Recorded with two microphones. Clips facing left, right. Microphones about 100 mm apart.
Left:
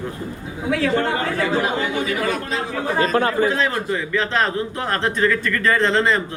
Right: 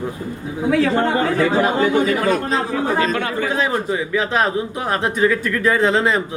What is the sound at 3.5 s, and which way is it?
Speech, 5° right (ahead or behind).